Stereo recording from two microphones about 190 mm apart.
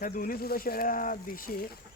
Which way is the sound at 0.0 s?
50° left (ahead or behind).